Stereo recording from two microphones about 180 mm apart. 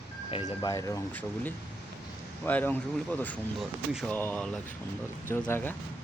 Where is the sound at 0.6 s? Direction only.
20° left (ahead or behind).